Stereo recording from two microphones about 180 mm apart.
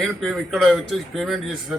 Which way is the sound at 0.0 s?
Centre (ahead or behind).